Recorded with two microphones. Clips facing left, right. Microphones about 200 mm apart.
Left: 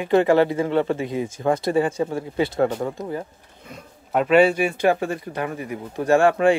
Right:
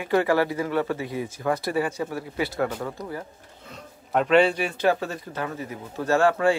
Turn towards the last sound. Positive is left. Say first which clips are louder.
# left 4 dB
turn(degrees=15)  # may be behind; listen again after turning